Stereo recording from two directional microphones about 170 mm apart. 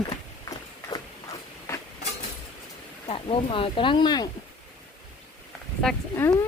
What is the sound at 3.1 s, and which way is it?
Speech, 30° left (ahead or behind).